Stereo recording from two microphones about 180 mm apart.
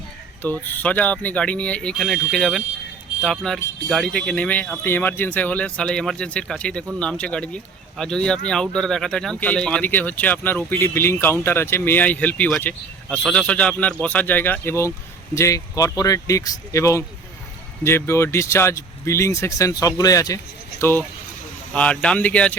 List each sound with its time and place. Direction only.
0.4 s speech: 10° left (ahead or behind)
21.7 s speech: 5° left (ahead or behind)